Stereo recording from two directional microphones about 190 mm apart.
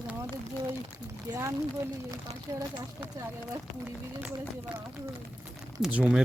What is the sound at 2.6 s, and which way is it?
Speech, 20° right (ahead or behind).